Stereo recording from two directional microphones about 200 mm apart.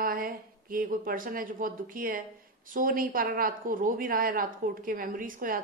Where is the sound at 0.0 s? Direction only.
45° right (ahead or behind).